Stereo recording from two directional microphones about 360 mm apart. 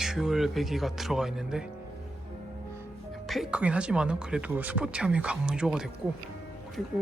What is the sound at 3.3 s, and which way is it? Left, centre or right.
Speech, centre.